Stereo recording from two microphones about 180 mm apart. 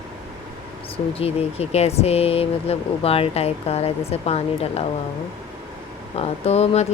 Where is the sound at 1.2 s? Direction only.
35° left (ahead or behind).